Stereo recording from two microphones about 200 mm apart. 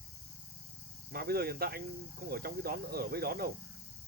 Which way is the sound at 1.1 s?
50° right (ahead or behind).